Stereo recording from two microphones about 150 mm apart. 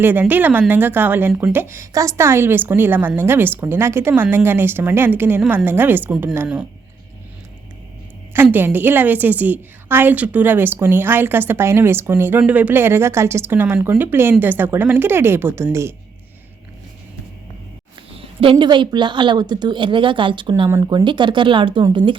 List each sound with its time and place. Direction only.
0.0 s a woman's voice: 15° right (ahead or behind)
8.3 s a woman's voice: 15° right (ahead or behind)
18.1 s a sound: 40° right (ahead or behind)
18.5 s speech: 30° right (ahead or behind)